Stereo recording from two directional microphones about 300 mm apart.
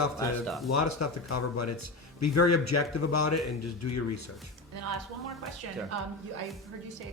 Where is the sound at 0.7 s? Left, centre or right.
Left.